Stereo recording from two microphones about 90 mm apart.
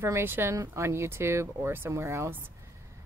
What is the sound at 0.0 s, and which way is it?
Speech, 25° right (ahead or behind).